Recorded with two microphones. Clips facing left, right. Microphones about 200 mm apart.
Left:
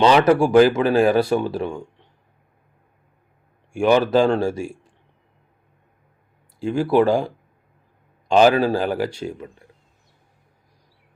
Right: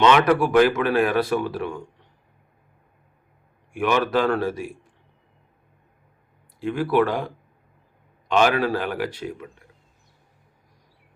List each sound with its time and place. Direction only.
0.0 s speech: 30° left (ahead or behind)
3.7 s speech: 30° left (ahead or behind)
6.6 s speech: 30° left (ahead or behind)